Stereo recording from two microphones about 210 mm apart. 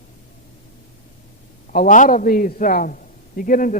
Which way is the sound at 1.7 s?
40° left (ahead or behind).